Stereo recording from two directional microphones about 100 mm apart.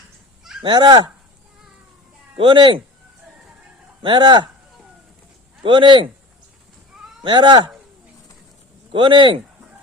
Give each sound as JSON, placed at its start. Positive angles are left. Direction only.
{"t": 0.6, "sound": "speech", "side_deg": -50}
{"t": 2.3, "sound": "speech", "side_deg": -55}
{"t": 4.0, "sound": "speech", "side_deg": -50}
{"t": 5.6, "sound": "speech", "side_deg": -50}
{"t": 7.2, "sound": "speech", "side_deg": -50}
{"t": 8.9, "sound": "speech", "side_deg": -55}